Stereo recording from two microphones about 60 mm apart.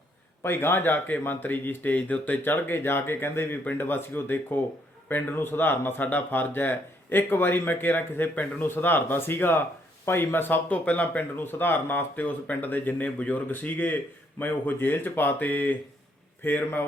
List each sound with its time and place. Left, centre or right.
0.4 s speech: left